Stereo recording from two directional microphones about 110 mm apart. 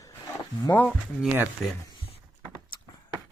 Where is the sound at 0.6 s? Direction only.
15° left (ahead or behind).